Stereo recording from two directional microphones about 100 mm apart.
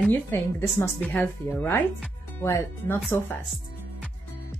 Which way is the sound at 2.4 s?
30° left (ahead or behind).